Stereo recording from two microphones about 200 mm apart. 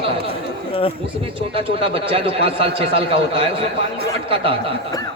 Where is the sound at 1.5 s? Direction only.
25° right (ahead or behind).